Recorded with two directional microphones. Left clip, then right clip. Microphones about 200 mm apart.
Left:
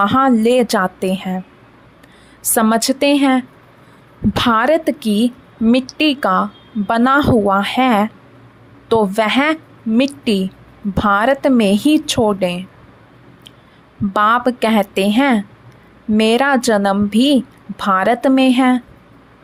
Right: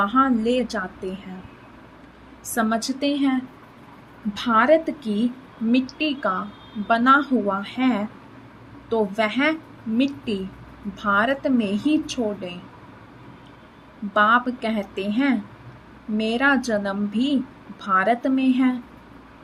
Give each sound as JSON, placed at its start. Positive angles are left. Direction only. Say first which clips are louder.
{"t": 0.0, "sound": "a woman's voice", "louder": "left 7 dB", "side_deg": 55}
{"t": 2.6, "sound": "speech", "louder": "left 9 dB", "side_deg": 55}
{"t": 14.1, "sound": "speech", "louder": "left 4 dB", "side_deg": 55}